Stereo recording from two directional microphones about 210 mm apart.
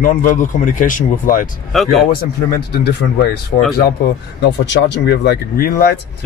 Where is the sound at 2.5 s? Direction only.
50° left (ahead or behind).